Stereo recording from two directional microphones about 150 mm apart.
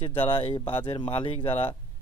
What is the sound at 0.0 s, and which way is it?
Speech, 40° left (ahead or behind).